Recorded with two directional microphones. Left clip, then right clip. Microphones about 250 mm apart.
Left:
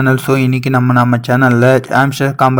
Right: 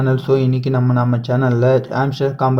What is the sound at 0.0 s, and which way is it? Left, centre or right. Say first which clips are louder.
Speech: left 4 dB; left.